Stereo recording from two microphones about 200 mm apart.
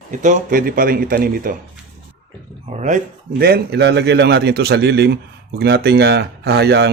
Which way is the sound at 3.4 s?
50° right (ahead or behind).